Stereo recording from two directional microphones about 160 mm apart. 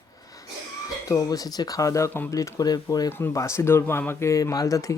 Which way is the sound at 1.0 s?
20° left (ahead or behind).